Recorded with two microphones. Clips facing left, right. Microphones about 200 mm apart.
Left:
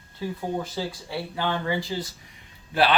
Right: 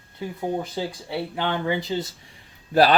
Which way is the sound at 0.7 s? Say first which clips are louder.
Right 2 dB; 20° right (ahead or behind).